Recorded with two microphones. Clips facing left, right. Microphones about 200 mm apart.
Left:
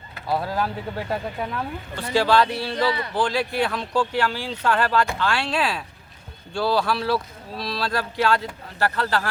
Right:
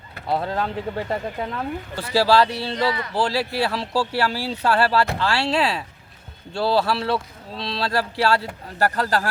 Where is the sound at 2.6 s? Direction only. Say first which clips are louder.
Even; 25° right (ahead or behind).